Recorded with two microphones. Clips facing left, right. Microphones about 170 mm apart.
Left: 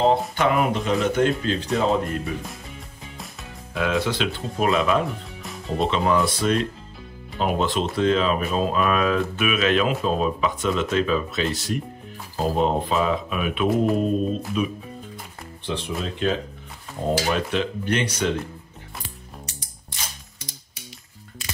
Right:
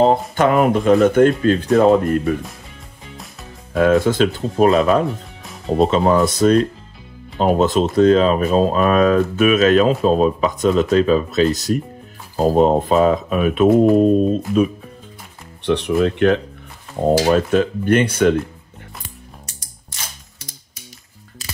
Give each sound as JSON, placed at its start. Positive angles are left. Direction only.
{"t": 0.4, "sound": "speech", "side_deg": -45}
{"t": 3.7, "sound": "speech", "side_deg": -45}
{"t": 15.6, "sound": "speech", "side_deg": -70}
{"t": 17.2, "sound": "speech", "side_deg": -45}